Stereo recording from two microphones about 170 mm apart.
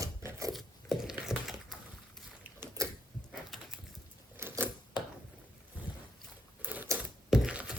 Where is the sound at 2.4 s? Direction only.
15° right (ahead or behind).